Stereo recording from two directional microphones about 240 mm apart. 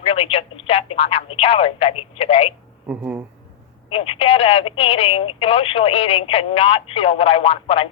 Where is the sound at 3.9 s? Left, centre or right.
Left.